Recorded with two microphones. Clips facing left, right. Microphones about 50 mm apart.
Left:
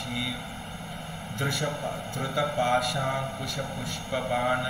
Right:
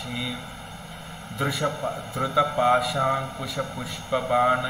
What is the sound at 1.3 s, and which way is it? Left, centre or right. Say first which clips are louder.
A man's voice: right 4 dB; centre.